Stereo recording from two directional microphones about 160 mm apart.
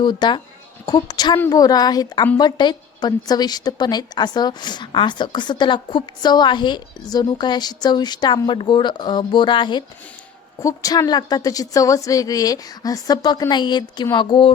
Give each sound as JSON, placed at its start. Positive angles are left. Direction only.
{"t": 0.0, "sound": "a woman's voice", "side_deg": 30}